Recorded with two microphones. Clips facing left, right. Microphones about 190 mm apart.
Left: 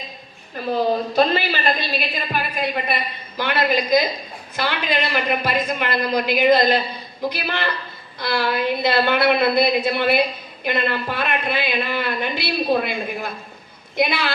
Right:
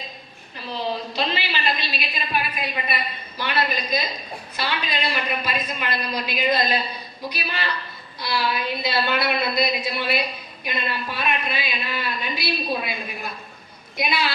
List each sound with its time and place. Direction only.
0.5 s a woman's voice: 50° left (ahead or behind)